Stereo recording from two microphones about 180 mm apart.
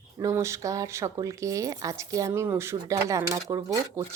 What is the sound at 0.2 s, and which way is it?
Speech, 15° right (ahead or behind).